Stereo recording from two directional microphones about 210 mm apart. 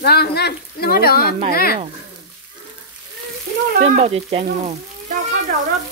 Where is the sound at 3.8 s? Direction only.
30° right (ahead or behind).